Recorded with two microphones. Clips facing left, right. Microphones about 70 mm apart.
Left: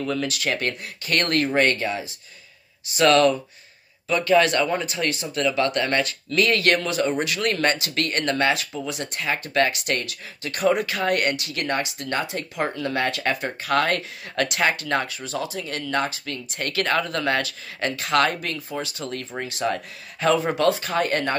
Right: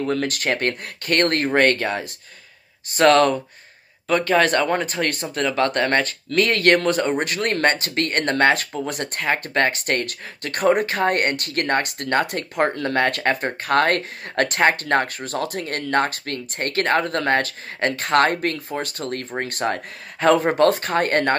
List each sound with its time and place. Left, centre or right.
0.0 s speech: right